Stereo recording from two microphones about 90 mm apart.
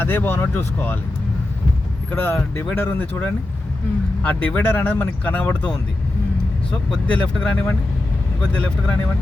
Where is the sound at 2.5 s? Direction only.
25° left (ahead or behind).